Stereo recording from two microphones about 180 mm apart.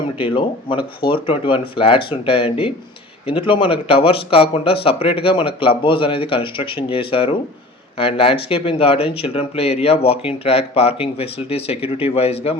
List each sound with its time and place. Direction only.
1.0 s speech: 30° left (ahead or behind)